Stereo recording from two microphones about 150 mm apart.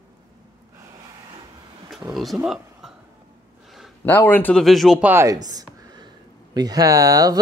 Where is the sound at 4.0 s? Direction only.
10° left (ahead or behind).